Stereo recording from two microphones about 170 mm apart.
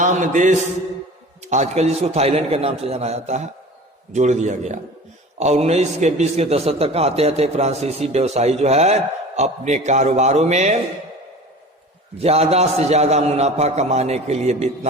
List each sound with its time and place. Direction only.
0.0 s a man's voice: 45° right (ahead or behind)
12.2 s a man's voice: 35° right (ahead or behind)